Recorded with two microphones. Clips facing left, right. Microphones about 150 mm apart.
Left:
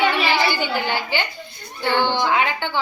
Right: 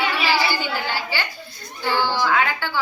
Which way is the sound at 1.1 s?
20° left (ahead or behind).